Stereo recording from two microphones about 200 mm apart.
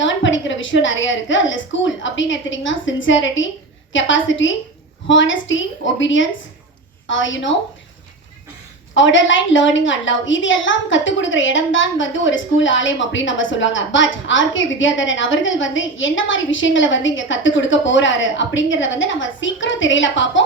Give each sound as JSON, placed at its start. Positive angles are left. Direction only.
{"t": 0.0, "sound": "a woman's voice", "side_deg": 70}
{"t": 9.0, "sound": "a woman's voice", "side_deg": 70}